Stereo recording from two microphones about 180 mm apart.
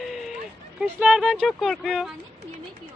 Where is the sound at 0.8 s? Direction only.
5° right (ahead or behind).